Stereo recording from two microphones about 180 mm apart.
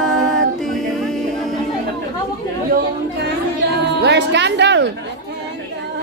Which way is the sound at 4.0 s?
75° right (ahead or behind).